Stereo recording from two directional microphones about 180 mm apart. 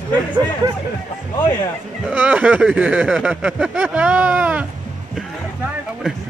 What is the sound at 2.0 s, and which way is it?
Speech, 10° right (ahead or behind).